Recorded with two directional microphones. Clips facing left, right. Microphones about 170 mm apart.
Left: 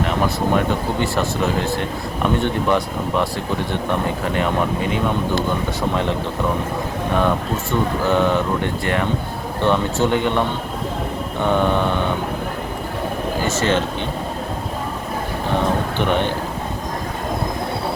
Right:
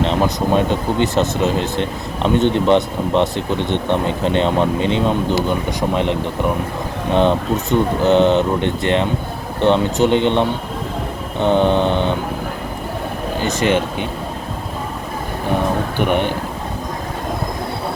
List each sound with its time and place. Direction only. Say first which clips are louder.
0.0 s speech: right 3 dB; 25° right (ahead or behind)
13.4 s speech: right 3 dB; 15° right (ahead or behind)
16.0 s speech: right 3 dB; 15° right (ahead or behind)